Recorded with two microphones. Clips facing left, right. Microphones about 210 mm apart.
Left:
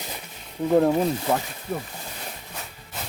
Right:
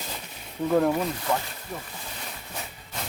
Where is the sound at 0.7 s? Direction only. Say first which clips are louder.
Left 3 dB; 25° left (ahead or behind).